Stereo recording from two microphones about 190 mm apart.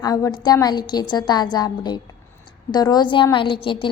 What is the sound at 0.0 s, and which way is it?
A woman's voice, 20° left (ahead or behind).